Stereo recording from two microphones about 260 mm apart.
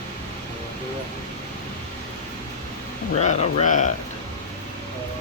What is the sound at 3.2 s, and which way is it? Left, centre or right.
Speech, left.